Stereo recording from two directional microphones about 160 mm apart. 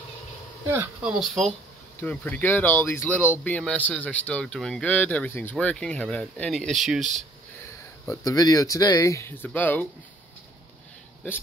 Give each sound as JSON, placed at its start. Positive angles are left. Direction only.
{"t": 0.7, "sound": "speech", "side_deg": -10}
{"t": 2.0, "sound": "speech", "side_deg": 10}
{"t": 8.0, "sound": "speech", "side_deg": 20}